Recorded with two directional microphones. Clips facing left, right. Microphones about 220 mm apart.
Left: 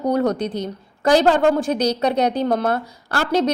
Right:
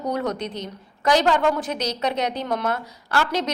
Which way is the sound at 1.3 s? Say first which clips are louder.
Left 4 dB; 50° left (ahead or behind).